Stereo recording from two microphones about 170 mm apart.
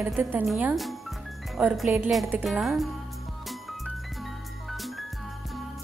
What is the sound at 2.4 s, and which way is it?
Speech, centre (ahead or behind).